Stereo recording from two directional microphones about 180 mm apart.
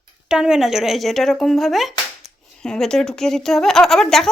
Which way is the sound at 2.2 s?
20° right (ahead or behind).